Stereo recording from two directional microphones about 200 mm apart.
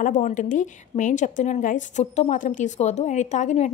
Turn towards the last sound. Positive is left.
turn(degrees=35)  # may be behind; listen again after turning